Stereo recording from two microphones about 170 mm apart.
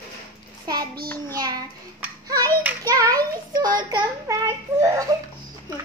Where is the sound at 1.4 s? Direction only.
25° right (ahead or behind).